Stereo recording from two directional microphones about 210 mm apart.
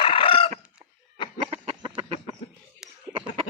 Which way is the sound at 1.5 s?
25° right (ahead or behind).